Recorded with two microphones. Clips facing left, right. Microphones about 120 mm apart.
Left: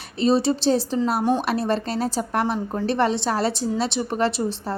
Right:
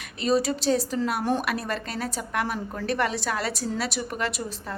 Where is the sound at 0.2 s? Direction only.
30° left (ahead or behind).